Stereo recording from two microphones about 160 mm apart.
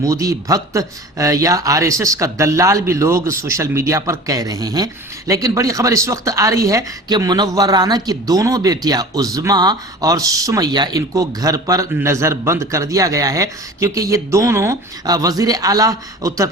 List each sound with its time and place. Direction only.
0.0 s speech: 20° right (ahead or behind)